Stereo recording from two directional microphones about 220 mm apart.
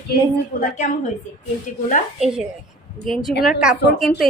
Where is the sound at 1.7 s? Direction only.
35° left (ahead or behind).